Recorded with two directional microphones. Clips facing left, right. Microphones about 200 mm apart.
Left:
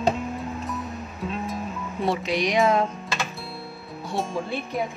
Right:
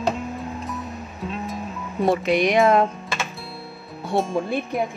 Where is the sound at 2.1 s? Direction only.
55° right (ahead or behind).